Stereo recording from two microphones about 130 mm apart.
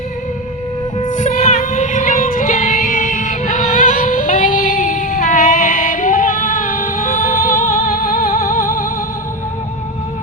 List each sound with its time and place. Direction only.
1.1 s music: 70° left (ahead or behind); by 8.9 s 90° left